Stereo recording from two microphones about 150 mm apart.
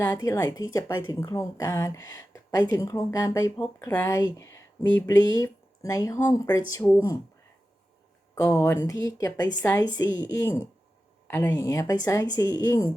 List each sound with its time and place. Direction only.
0.0 s a woman's voice: 20° left (ahead or behind)
8.6 s a woman's voice: 20° left (ahead or behind)